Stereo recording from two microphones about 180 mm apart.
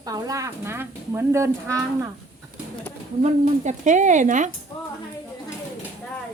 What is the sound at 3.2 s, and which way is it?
Speech, 40° right (ahead or behind).